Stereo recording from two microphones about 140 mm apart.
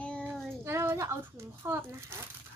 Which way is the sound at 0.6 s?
20° right (ahead or behind).